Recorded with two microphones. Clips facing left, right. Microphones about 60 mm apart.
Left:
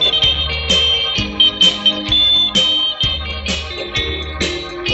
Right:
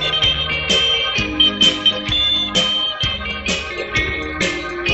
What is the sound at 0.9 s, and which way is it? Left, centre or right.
Music, right.